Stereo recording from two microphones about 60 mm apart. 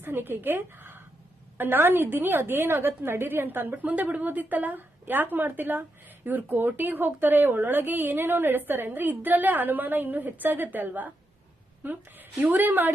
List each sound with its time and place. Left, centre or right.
0.0 s a woman's voice: right
3.8 s a woman's voice: right